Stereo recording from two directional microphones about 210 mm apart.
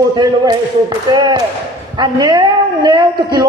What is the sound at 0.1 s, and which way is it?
A woman's voice, 20° right (ahead or behind).